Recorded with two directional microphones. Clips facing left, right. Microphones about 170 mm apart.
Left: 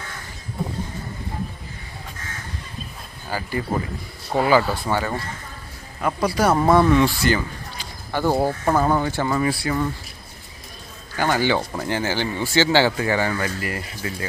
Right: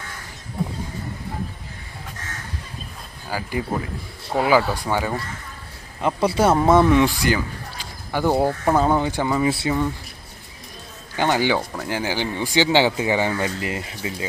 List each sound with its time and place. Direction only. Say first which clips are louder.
3.2 s speech: even; 10° right (ahead or behind)
6.0 s a man's voice: right 2 dB; 25° right (ahead or behind)
11.2 s speech: right 1 dB; 15° right (ahead or behind)
11.5 s speech: left 1 dB; centre (ahead or behind)
11.9 s a man's voice: even; 15° right (ahead or behind)